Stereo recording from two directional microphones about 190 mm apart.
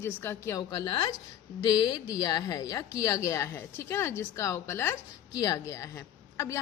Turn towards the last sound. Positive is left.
turn(degrees=15)  # may be behind; listen again after turning